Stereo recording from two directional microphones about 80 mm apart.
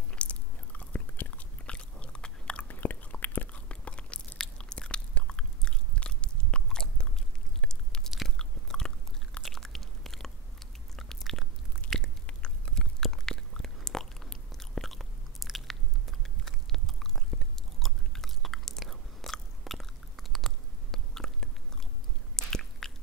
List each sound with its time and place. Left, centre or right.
0.1 s biting: centre